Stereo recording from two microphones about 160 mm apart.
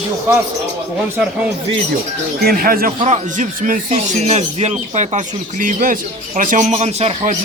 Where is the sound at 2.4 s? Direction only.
65° right (ahead or behind).